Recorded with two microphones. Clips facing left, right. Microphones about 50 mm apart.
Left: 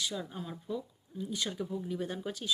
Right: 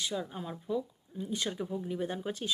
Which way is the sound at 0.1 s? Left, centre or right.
Centre.